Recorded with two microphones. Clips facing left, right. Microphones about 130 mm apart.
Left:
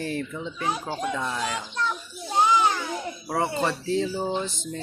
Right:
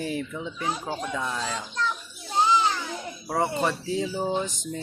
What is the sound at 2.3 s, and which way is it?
Children playing, 15° left (ahead or behind).